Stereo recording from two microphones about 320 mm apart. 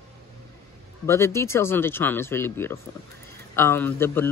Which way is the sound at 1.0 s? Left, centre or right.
Centre.